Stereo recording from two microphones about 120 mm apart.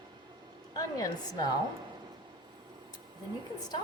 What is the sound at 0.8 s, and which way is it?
Speech, 30° left (ahead or behind).